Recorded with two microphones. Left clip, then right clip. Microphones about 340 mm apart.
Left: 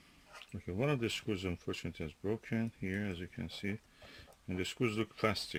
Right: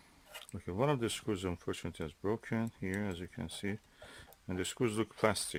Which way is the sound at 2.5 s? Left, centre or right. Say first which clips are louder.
Right 1 dB; right.